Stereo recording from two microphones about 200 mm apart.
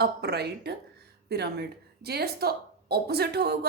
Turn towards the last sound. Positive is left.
turn(degrees=-55)  # may be behind; listen again after turning